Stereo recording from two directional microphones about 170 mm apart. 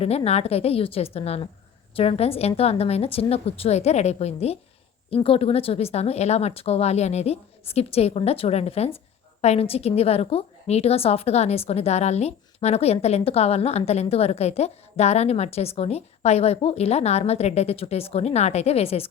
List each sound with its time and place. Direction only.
0.3 s a woman's voice: 40° left (ahead or behind)